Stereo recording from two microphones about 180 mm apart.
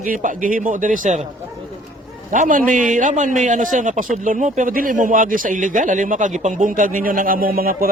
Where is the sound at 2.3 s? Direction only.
45° right (ahead or behind).